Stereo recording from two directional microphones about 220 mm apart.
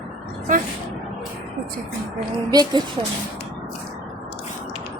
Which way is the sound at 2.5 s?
15° right (ahead or behind).